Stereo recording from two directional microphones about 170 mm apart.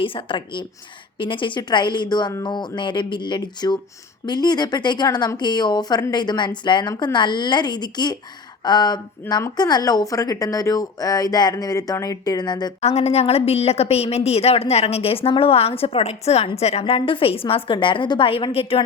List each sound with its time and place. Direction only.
0.0 s a woman's voice: 30° left (ahead or behind)
12.8 s a woman's voice: 40° left (ahead or behind)